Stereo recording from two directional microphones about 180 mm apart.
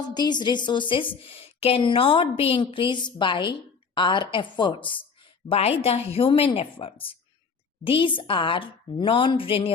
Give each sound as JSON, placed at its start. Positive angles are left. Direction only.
{"t": 0.1, "sound": "a woman's voice", "side_deg": 25}